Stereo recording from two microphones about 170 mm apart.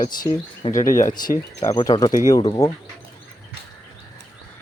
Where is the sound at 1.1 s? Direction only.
25° left (ahead or behind).